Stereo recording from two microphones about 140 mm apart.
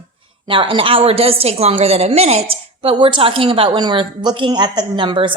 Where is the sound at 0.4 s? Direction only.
40° right (ahead or behind).